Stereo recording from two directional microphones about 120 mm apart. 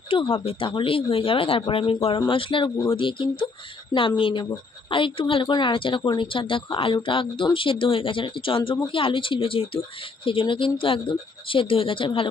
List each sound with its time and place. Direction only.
0.1 s speech: 45° left (ahead or behind)